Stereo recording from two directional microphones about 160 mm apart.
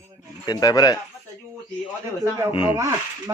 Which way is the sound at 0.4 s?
25° left (ahead or behind).